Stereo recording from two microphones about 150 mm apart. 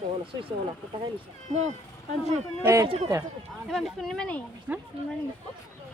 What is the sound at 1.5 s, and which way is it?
Speech, 50° right (ahead or behind).